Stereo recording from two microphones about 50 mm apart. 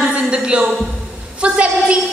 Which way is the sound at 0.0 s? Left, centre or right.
Centre.